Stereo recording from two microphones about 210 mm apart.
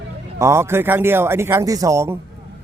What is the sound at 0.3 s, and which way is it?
Speech, 15° right (ahead or behind).